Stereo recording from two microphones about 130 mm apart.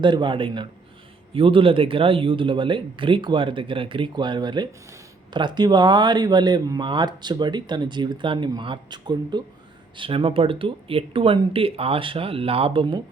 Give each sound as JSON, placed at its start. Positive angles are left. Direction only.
{"t": 0.0, "sound": "speech", "side_deg": -35}